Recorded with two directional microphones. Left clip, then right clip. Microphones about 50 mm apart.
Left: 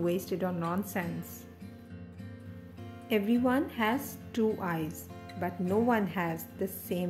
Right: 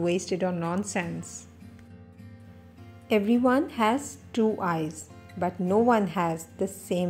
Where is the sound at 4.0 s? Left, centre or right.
Right.